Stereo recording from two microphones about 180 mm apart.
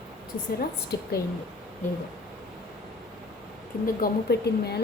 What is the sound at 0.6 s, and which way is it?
Speech, 60° left (ahead or behind).